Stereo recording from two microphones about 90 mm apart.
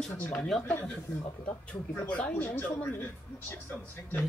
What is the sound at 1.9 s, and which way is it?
Speech, 15° left (ahead or behind).